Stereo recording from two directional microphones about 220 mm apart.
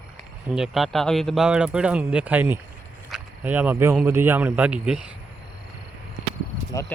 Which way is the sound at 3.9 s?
10° right (ahead or behind).